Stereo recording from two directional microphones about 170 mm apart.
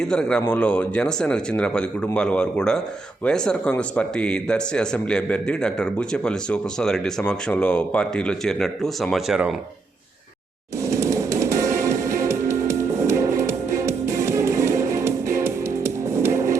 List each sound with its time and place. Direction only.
0.0 s a man's voice: 5° left (ahead or behind)
10.8 s music: 15° right (ahead or behind)